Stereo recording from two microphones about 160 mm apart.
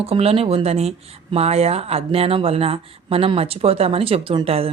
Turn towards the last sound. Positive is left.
turn(degrees=-35)  # may be behind; listen again after turning